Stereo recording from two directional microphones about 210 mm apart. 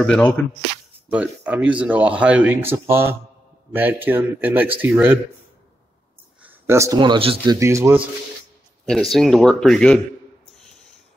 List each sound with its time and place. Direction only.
0.0 s speech: 5° left (ahead or behind)
1.1 s speech: 5° right (ahead or behind)
6.4 s speech: 15° right (ahead or behind)
7.5 s speech: 15° right (ahead or behind)
8.8 s speech: centre (ahead or behind)